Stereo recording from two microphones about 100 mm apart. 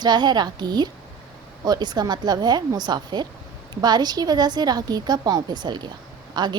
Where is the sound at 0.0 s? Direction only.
45° right (ahead or behind).